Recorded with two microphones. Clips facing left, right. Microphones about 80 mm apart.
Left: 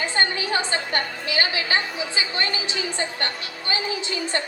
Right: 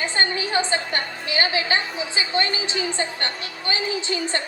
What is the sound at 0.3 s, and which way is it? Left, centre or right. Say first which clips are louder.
A woman's voice: right 2 dB; right.